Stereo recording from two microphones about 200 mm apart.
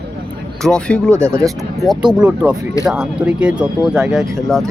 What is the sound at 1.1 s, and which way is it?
Speech, 15° right (ahead or behind).